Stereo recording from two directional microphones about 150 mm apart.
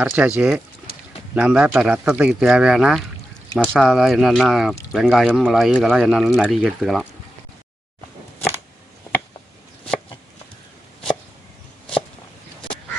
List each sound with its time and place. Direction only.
0.0 s speech: 10° right (ahead or behind)